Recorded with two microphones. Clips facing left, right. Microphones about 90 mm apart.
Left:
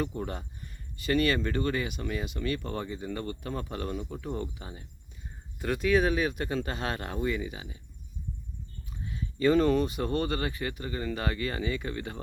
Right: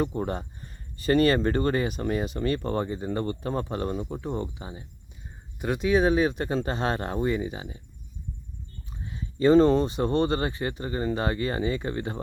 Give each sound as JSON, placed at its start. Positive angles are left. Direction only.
{"t": 0.0, "sound": "speech", "side_deg": -35}
{"t": 8.9, "sound": "speech", "side_deg": -30}